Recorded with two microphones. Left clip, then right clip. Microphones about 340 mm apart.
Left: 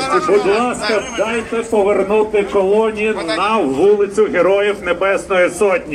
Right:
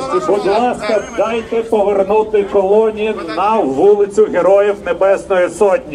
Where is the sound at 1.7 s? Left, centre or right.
Right.